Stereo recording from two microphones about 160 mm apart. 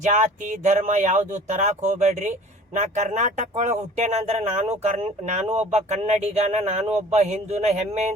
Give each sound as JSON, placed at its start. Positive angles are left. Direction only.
{"t": 0.0, "sound": "speech", "side_deg": -50}